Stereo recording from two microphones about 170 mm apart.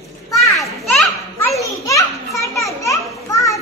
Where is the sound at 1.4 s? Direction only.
20° left (ahead or behind).